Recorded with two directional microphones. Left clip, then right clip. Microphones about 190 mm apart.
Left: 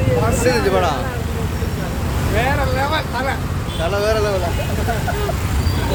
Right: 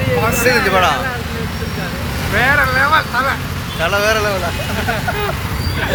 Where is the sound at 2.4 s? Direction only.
10° left (ahead or behind).